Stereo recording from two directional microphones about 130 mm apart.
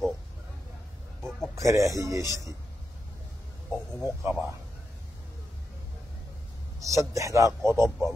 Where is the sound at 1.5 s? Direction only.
25° right (ahead or behind).